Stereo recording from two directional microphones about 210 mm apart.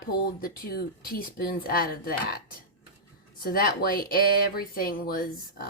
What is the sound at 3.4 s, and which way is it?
Speech, 45° left (ahead or behind).